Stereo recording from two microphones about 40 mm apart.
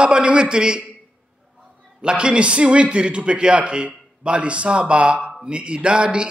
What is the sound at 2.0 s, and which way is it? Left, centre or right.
A man's voice, right.